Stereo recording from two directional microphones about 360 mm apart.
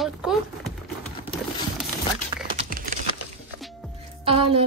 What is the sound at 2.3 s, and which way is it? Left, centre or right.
Typing, centre.